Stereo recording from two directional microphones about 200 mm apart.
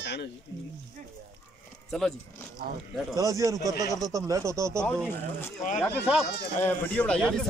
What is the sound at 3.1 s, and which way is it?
Speech, 15° right (ahead or behind).